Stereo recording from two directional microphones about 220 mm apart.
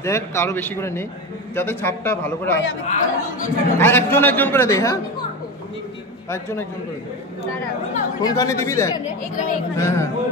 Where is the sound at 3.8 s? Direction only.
10° left (ahead or behind).